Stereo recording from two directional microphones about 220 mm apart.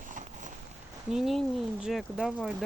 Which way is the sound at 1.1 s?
Centre (ahead or behind).